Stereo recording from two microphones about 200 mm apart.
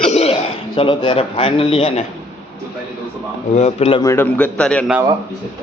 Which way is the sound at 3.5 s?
30° left (ahead or behind).